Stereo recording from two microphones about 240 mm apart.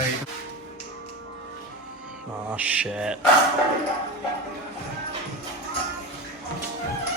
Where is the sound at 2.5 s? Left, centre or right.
Centre.